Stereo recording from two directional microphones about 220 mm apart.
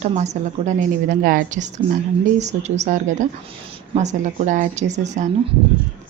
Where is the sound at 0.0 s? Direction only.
30° right (ahead or behind).